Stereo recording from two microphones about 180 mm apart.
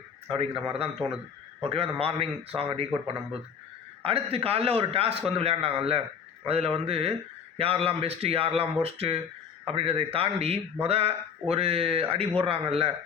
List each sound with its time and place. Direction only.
0.3 s speech: 30° right (ahead or behind)
4.0 s speech: 30° right (ahead or behind)